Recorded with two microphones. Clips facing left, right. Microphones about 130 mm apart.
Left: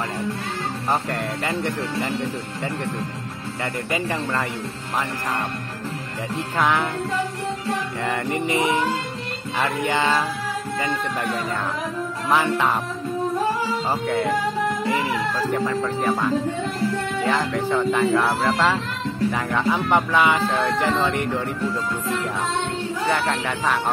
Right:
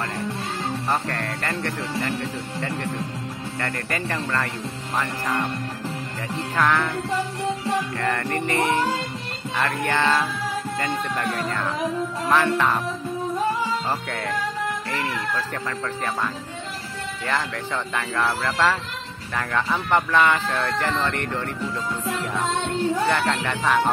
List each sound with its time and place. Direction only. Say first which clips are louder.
1.1 s speech: left 3 dB; 10° left (ahead or behind)
6.6 s speech: even; 15° left (ahead or behind)
8.0 s speech: left 1 dB; 15° left (ahead or behind)
12.3 s speech: even; 15° left (ahead or behind)
14.9 s speech: left 4 dB; 15° left (ahead or behind)
17.2 s speech: left 3 dB; 10° left (ahead or behind)
23.0 s speech: even; 5° left (ahead or behind)